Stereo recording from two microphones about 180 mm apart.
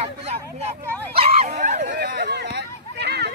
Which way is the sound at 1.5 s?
45° right (ahead or behind).